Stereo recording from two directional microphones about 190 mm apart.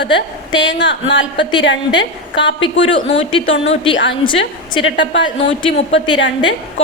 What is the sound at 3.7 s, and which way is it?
Speech, 30° left (ahead or behind).